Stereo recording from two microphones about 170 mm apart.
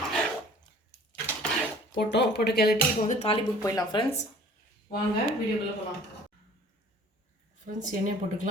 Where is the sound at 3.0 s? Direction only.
40° left (ahead or behind).